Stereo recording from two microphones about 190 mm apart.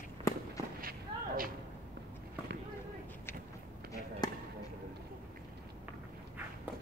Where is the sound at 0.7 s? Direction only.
50° right (ahead or behind).